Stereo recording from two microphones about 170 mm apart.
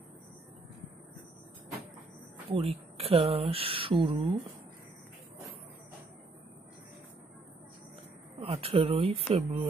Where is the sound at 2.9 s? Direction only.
35° right (ahead or behind).